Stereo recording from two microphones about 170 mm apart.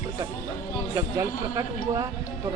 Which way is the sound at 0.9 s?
20° right (ahead or behind).